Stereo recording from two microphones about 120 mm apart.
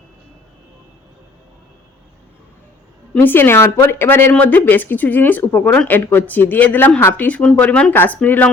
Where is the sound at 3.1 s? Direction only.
15° left (ahead or behind).